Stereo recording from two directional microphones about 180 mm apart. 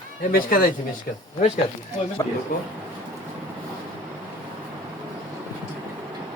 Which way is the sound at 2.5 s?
50° left (ahead or behind).